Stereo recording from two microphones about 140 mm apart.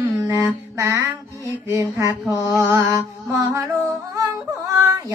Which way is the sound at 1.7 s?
20° right (ahead or behind).